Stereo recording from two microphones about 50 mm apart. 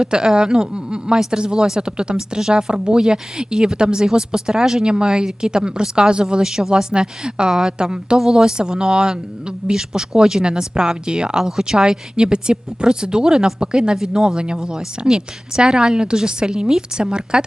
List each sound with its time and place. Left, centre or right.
0.0 s a woman's voice: centre